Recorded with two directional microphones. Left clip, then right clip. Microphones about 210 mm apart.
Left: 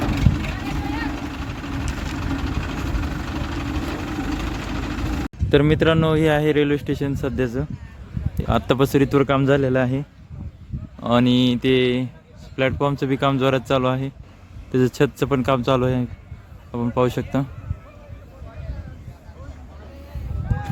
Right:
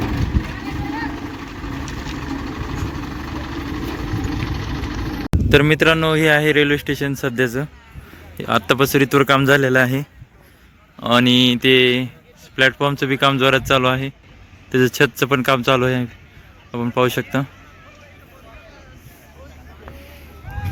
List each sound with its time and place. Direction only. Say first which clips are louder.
0.4 s vehicle: even; 30° left (ahead or behind)
5.5 s a man's voice: right 4 dB; 5° left (ahead or behind)